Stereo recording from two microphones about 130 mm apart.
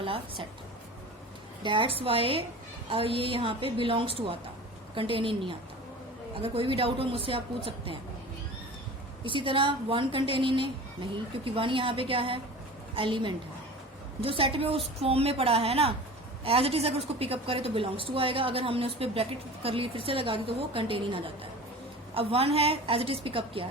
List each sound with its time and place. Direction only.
0.0 s a woman's voice: 45° right (ahead or behind)
1.6 s a woman's voice: 40° right (ahead or behind)
9.2 s a woman's voice: 40° right (ahead or behind)